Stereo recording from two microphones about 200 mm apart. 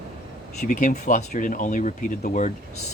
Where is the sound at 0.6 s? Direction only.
40° left (ahead or behind).